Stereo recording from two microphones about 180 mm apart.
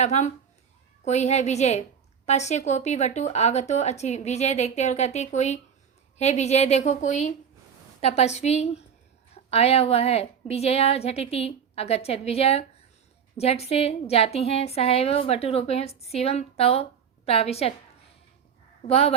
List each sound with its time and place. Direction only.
0.0 s a woman's voice: 40° left (ahead or behind)
18.9 s a woman's voice: 35° left (ahead or behind)